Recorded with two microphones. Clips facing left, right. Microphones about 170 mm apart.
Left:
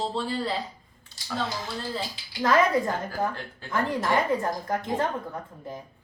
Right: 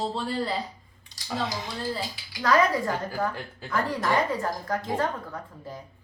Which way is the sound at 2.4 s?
20° left (ahead or behind).